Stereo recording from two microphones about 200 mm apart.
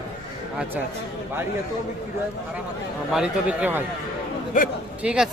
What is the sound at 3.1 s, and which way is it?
Speech, 5° right (ahead or behind).